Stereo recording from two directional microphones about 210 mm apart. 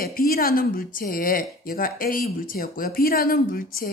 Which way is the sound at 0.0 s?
45° left (ahead or behind).